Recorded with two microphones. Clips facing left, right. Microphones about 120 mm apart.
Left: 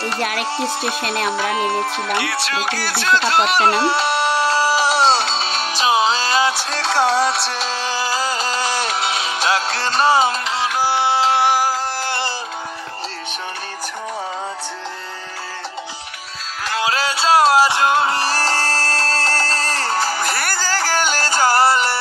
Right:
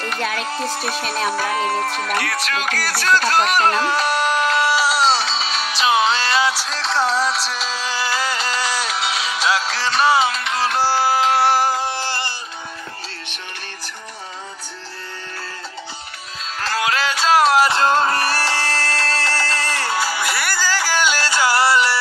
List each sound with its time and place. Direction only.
1.0 s music: 60° left (ahead or behind)
1.7 s speech: 25° left (ahead or behind)
5.1 s music: 55° left (ahead or behind)
6.6 s music: 60° left (ahead or behind)
7.8 s music: 40° left (ahead or behind)
10.6 s music: 15° left (ahead or behind)
11.4 s music: 10° left (ahead or behind)
16.8 s music: 30° left (ahead or behind)
17.6 s a sound: 10° left (ahead or behind)
18.2 s music: 40° left (ahead or behind)